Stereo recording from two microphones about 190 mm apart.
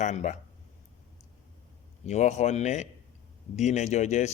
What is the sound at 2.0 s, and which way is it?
Speech, 35° left (ahead or behind).